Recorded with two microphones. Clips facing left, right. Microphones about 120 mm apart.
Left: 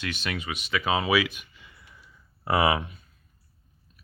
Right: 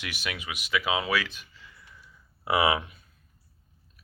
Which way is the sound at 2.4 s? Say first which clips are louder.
Left 1 dB; 5° right (ahead or behind).